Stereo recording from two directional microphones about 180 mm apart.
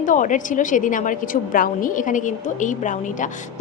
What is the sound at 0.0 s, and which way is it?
A woman's voice, 45° left (ahead or behind).